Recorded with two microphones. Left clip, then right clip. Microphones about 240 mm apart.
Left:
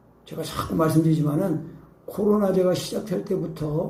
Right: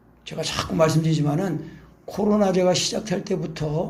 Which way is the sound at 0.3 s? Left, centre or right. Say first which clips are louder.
Right 3 dB; right.